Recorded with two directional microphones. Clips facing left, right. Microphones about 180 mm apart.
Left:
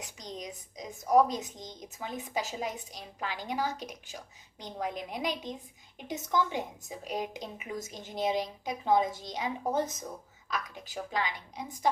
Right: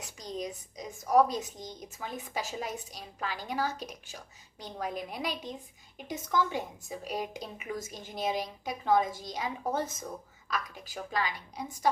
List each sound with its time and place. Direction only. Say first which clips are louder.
0.2 s a woman's voice: right 6 dB; 20° left (ahead or behind)